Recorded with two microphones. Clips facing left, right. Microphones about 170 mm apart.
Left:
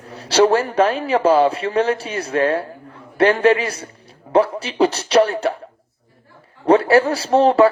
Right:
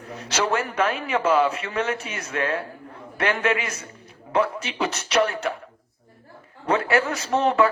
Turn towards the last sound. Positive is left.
turn(degrees=35)  # may be behind; listen again after turning